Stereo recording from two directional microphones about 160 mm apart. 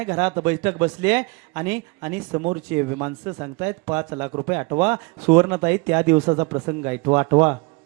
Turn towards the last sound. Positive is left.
turn(degrees=-10)  # may be behind; listen again after turning